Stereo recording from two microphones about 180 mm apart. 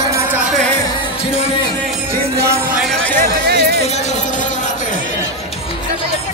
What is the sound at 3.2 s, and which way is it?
Music, 60° right (ahead or behind).